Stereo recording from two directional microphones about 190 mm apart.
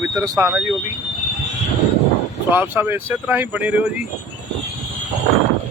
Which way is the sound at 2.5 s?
10° right (ahead or behind).